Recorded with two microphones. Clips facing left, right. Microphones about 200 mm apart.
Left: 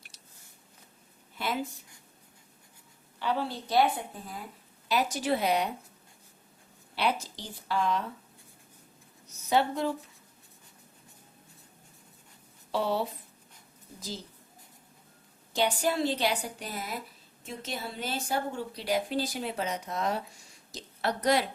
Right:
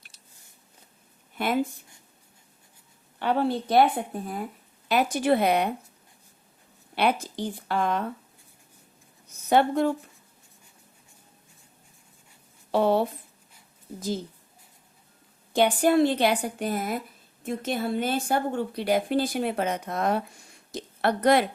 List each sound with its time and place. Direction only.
3.2 s speech: 55° right (ahead or behind)
6.9 s speech: 55° right (ahead or behind)
9.3 s a woman's voice: 55° right (ahead or behind)
12.7 s speech: 55° right (ahead or behind)
15.5 s speech: 55° right (ahead or behind)